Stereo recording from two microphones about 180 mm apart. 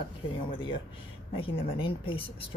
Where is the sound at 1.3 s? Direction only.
30° left (ahead or behind).